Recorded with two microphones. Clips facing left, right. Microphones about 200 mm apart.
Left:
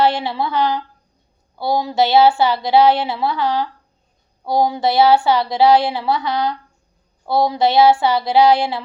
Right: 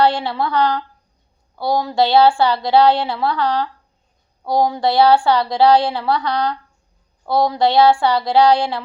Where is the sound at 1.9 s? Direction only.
20° left (ahead or behind).